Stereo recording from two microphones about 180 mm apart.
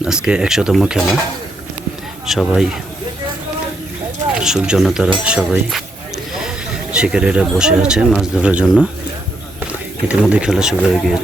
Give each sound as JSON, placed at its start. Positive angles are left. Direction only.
{"t": 0.0, "sound": "speech", "side_deg": -5}
{"t": 2.2, "sound": "speech", "side_deg": 0}
{"t": 4.4, "sound": "speech", "side_deg": -5}
{"t": 6.9, "sound": "speech", "side_deg": -5}
{"t": 10.1, "sound": "speech", "side_deg": -5}